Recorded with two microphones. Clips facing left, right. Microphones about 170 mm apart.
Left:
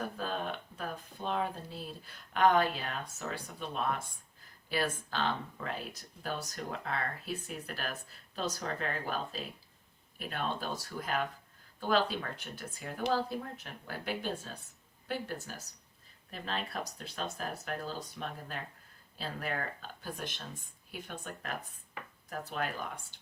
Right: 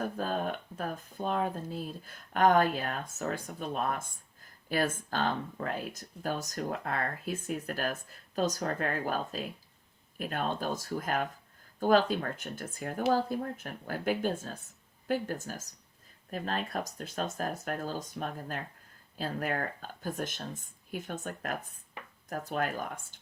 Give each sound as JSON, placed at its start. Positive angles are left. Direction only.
{"t": 0.0, "sound": "speech", "side_deg": -45}